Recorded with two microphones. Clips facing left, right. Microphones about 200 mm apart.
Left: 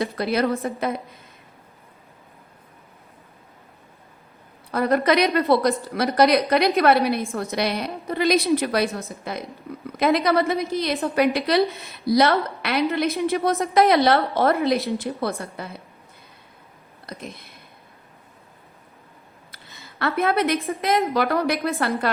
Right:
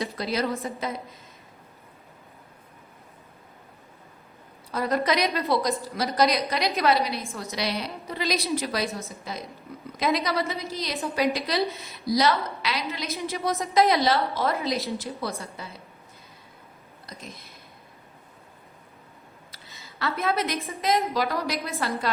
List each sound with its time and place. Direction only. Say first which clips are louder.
0.0 s a woman's voice: left 5 dB; 60° left (ahead or behind)
4.7 s a woman's voice: left 5 dB; 60° left (ahead or behind)
17.1 s a woman's voice: left 7 dB; 60° left (ahead or behind)
19.8 s a woman's voice: left 5 dB; 55° left (ahead or behind)